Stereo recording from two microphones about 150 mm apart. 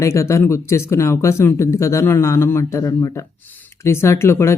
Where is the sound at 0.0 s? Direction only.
20° left (ahead or behind).